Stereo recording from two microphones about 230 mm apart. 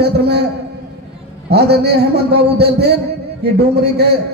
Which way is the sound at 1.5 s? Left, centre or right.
Right.